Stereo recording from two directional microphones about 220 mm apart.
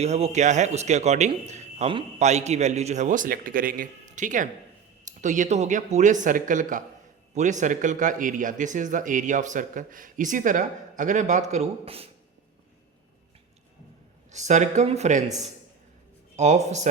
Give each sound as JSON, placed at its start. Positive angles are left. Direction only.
{"t": 0.0, "sound": "speech", "side_deg": -30}
{"t": 14.3, "sound": "speech", "side_deg": -30}
{"t": 16.3, "sound": "speech", "side_deg": -30}